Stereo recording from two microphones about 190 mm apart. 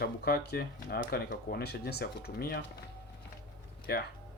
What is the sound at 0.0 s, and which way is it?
Speech, 55° left (ahead or behind).